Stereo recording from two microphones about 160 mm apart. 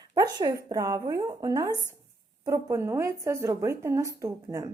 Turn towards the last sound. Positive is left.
turn(degrees=-20)  # may be behind; listen again after turning